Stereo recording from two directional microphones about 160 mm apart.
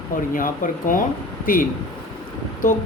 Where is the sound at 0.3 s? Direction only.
60° left (ahead or behind).